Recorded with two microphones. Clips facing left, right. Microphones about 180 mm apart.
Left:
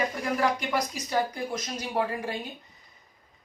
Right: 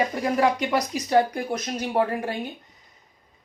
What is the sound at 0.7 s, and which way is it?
Speech, 65° right (ahead or behind).